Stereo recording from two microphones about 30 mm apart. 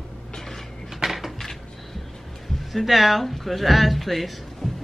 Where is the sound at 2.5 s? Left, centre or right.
Centre.